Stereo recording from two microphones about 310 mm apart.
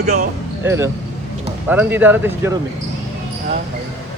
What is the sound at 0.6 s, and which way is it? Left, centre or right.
Speech, centre.